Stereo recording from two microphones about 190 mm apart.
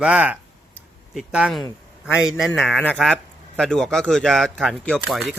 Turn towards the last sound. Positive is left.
turn(degrees=0)  # may be behind; listen again after turning